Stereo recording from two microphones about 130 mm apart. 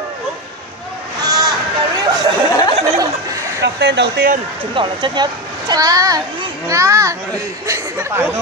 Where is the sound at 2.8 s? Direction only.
25° right (ahead or behind).